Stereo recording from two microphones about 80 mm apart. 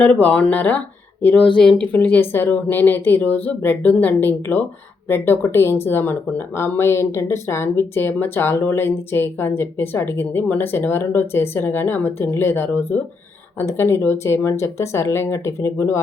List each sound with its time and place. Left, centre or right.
0.0 s a woman's voice: centre; by 16.0 s left